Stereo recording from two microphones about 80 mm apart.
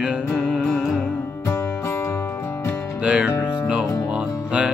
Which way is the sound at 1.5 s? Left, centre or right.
Left.